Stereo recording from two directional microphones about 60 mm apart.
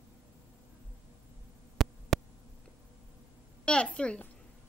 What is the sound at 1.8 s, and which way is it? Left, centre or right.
Hum, centre.